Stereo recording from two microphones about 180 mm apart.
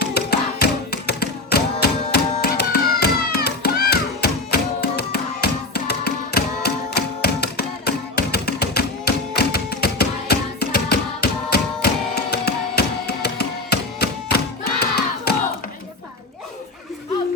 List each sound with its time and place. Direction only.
0.0 s music: 65° left (ahead or behind)